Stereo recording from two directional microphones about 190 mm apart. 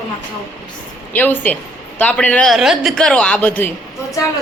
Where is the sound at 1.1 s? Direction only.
10° left (ahead or behind).